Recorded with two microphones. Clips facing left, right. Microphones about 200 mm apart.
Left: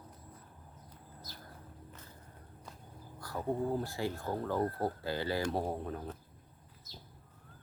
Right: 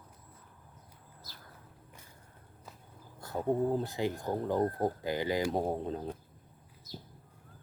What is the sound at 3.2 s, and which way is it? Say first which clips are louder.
Speech: right 4 dB; 25° right (ahead or behind).